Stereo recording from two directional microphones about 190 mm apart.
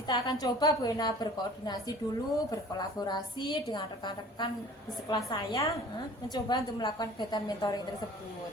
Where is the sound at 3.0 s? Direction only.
25° left (ahead or behind).